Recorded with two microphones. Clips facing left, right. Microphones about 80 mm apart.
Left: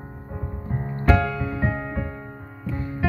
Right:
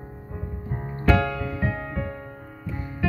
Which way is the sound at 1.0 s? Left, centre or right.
Centre.